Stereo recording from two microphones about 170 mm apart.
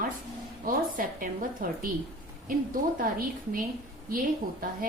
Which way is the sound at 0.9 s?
55° right (ahead or behind).